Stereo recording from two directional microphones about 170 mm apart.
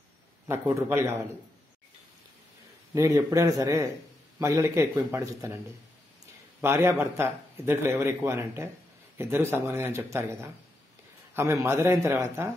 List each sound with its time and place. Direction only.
0.5 s speech: 15° right (ahead or behind)
2.9 s speech: 15° right (ahead or behind)
6.6 s speech: 15° right (ahead or behind)